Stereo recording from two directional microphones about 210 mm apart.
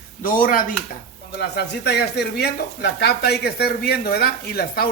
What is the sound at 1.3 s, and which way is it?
Speech, 50° left (ahead or behind).